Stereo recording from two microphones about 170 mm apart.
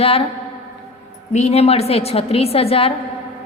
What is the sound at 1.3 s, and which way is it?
A woman's voice, 40° left (ahead or behind).